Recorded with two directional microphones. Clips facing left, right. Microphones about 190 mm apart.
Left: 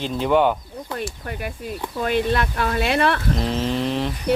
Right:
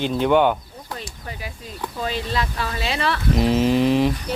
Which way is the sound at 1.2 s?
60° left (ahead or behind).